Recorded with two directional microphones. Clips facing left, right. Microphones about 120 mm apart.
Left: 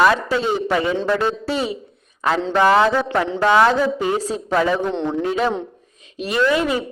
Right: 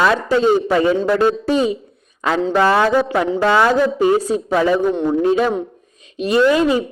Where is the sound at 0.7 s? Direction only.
35° right (ahead or behind).